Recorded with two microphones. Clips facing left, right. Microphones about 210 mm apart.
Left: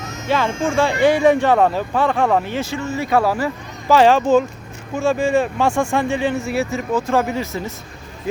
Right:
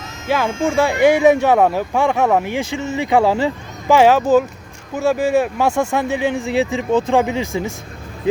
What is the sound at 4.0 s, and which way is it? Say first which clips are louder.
Speech: right 1 dB; 10° right (ahead or behind).